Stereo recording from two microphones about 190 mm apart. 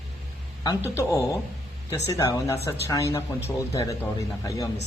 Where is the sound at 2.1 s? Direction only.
15° left (ahead or behind).